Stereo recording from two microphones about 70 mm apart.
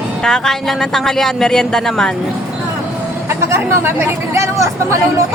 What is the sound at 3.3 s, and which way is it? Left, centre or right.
Speech, right.